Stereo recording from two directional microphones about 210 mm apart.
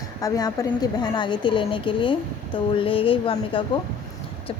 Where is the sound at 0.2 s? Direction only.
15° left (ahead or behind).